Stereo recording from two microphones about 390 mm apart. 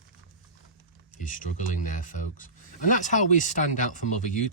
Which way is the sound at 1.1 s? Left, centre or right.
Centre.